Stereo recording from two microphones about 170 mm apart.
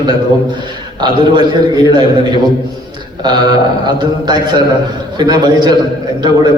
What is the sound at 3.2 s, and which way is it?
A man's voice, 25° right (ahead or behind).